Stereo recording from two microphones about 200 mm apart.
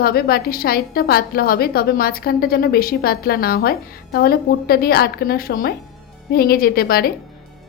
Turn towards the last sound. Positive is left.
turn(degrees=50)  # may be behind; listen again after turning